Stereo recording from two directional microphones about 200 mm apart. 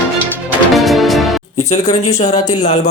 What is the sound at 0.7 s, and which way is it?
Music, centre (ahead or behind).